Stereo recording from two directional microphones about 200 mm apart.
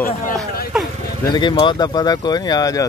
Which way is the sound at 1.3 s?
20° left (ahead or behind).